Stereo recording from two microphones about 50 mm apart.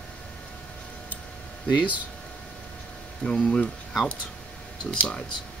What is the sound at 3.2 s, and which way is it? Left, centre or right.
Speech, centre.